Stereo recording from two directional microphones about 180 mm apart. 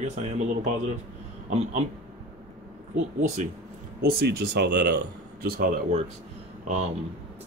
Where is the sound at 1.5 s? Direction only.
40° right (ahead or behind).